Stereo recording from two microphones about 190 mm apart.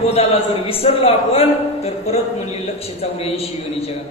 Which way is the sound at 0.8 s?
30° left (ahead or behind).